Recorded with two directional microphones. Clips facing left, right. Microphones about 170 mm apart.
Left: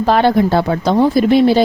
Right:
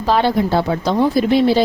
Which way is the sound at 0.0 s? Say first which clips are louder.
Left 4 dB; 55° left (ahead or behind).